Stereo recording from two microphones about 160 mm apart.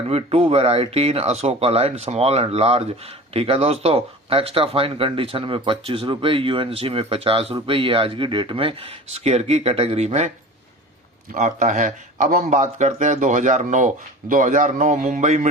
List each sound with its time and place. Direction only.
0.1 s a man's voice: 40° right (ahead or behind)